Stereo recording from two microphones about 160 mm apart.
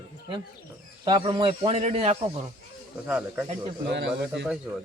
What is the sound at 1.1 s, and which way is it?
A man's voice, 30° right (ahead or behind).